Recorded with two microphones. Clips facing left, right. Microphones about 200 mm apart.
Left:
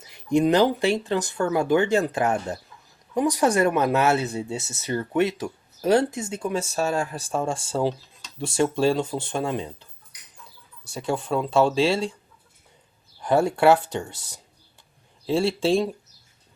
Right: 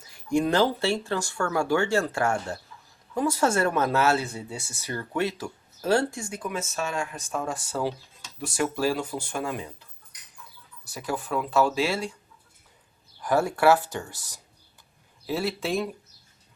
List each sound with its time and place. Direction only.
0.0 s speech: 20° left (ahead or behind)
10.8 s speech: 25° left (ahead or behind)
13.2 s speech: 25° left (ahead or behind)